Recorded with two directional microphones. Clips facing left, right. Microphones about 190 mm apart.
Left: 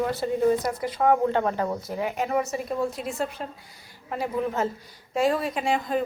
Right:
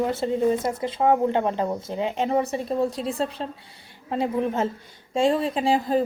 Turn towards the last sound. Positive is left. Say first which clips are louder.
# right 4 dB
turn(degrees=-30)  # may be behind; listen again after turning